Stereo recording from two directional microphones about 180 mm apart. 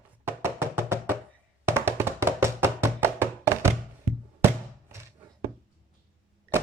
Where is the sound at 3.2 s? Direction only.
15° right (ahead or behind).